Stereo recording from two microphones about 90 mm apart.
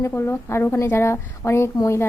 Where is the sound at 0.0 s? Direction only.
30° left (ahead or behind).